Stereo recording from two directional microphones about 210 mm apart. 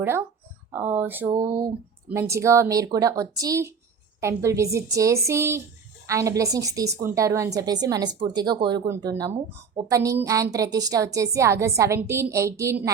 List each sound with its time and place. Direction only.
0.0 s a woman's voice: 10° right (ahead or behind)